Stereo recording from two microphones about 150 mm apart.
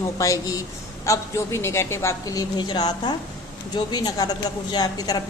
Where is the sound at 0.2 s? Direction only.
20° left (ahead or behind).